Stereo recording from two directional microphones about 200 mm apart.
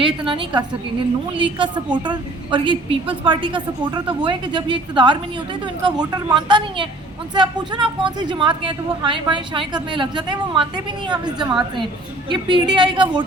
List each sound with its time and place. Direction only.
0.0 s a woman's voice: 25° right (ahead or behind)
12.3 s a woman's voice: 25° right (ahead or behind)